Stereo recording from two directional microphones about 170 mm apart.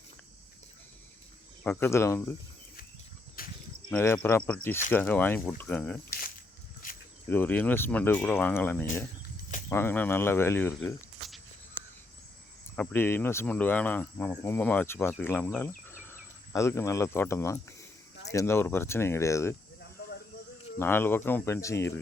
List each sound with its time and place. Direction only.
1.6 s speech: 10° left (ahead or behind)
3.4 s a sound: 55° left (ahead or behind)
3.8 s speech: 10° left (ahead or behind)
6.8 s cricket: 55° left (ahead or behind)
7.3 s speech: 10° left (ahead or behind)
12.7 s speech: 10° left (ahead or behind)
20.7 s speech: 15° left (ahead or behind)